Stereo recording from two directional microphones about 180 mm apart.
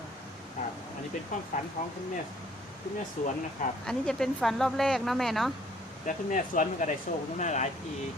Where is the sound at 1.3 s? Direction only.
50° left (ahead or behind).